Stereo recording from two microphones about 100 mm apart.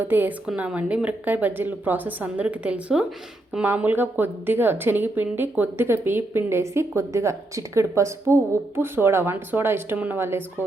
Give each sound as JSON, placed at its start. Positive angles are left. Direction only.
{"t": 0.0, "sound": "a woman's voice", "side_deg": -20}